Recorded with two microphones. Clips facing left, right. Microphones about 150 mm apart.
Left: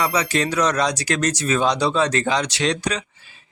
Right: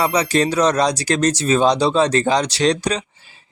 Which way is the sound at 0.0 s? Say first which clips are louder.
Right 4 dB; 30° right (ahead or behind).